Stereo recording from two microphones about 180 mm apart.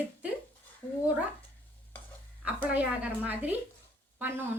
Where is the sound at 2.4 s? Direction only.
10° right (ahead or behind).